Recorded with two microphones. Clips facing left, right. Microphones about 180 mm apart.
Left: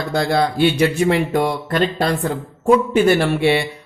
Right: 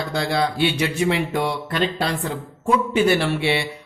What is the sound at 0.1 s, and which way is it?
Speech, 45° left (ahead or behind).